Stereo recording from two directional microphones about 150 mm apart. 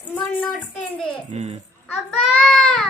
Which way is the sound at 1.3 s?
45° right (ahead or behind).